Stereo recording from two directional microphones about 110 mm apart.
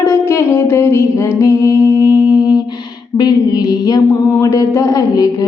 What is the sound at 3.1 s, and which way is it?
Humming, 35° left (ahead or behind).